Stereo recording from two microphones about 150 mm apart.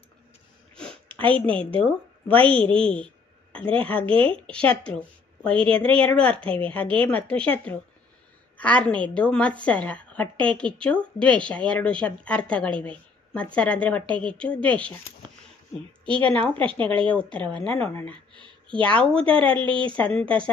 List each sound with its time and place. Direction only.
0.7 s a sound: 10° left (ahead or behind)
1.3 s a woman's voice: 10° left (ahead or behind)
4.1 s speech: 35° right (ahead or behind)
4.5 s a woman's voice: 5° left (ahead or behind)
16.1 s a woman's voice: 10° left (ahead or behind)
16.5 s speech: 35° right (ahead or behind)
17.2 s a woman's voice: 10° left (ahead or behind)
18.3 s a sound: 30° right (ahead or behind)
18.8 s a woman's voice: 10° left (ahead or behind)